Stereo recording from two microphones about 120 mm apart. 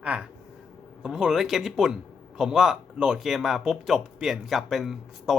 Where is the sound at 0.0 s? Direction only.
10° right (ahead or behind).